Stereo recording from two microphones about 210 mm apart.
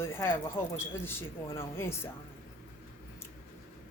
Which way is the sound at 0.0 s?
10° left (ahead or behind).